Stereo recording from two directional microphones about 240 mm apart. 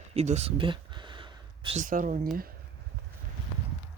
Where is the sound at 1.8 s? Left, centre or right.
Right.